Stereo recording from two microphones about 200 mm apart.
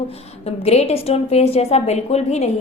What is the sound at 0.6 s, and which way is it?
A woman's voice, 30° left (ahead or behind).